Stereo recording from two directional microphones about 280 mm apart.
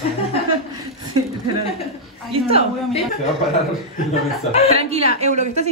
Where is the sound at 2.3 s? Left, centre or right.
Right.